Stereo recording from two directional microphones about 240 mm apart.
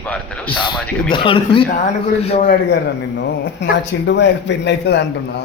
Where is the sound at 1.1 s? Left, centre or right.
Left.